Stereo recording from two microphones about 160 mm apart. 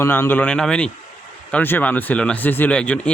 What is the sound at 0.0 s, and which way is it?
Speech, 15° left (ahead or behind).